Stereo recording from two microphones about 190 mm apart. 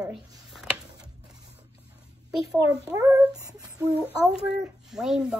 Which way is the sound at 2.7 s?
15° right (ahead or behind).